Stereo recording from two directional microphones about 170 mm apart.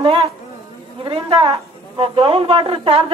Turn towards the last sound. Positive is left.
turn(degrees=-35)  # may be behind; listen again after turning